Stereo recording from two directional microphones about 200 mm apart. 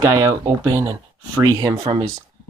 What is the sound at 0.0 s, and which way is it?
Speech, 15° right (ahead or behind).